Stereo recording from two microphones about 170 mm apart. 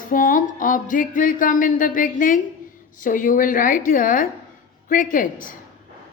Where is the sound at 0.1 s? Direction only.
55° left (ahead or behind).